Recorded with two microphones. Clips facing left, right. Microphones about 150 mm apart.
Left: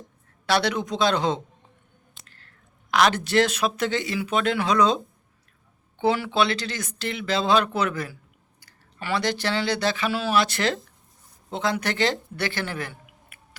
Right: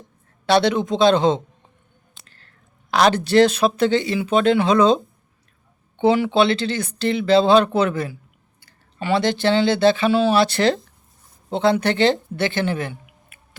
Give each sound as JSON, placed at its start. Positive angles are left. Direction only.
{"t": 0.4, "sound": "speech", "side_deg": -25}
{"t": 2.2, "sound": "squish", "side_deg": -30}
{"t": 2.9, "sound": "speech", "side_deg": -30}
{"t": 6.0, "sound": "speech", "side_deg": -20}